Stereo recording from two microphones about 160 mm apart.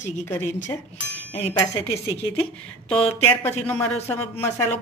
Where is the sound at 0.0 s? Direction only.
50° left (ahead or behind).